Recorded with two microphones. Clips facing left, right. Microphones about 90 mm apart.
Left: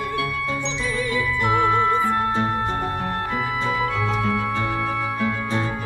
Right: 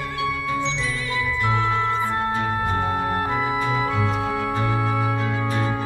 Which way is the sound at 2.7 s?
20° right (ahead or behind).